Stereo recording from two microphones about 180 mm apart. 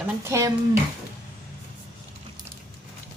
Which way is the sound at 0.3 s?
15° right (ahead or behind).